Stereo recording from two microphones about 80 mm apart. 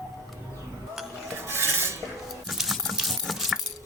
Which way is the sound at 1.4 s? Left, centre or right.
Right.